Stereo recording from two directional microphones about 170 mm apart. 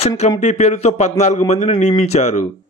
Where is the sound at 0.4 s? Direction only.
45° left (ahead or behind).